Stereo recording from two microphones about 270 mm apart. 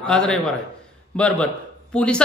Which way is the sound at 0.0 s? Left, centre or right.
Centre.